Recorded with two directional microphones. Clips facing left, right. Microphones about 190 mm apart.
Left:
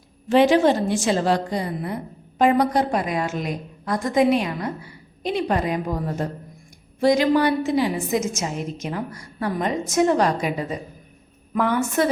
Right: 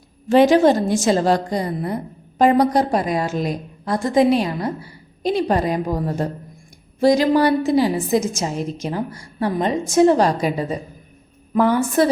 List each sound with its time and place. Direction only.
0.3 s a woman's voice: 40° right (ahead or behind)